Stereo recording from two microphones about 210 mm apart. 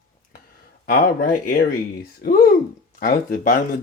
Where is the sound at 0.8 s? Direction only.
45° left (ahead or behind).